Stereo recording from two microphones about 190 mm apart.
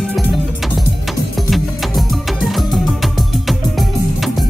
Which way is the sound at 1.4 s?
Centre (ahead or behind).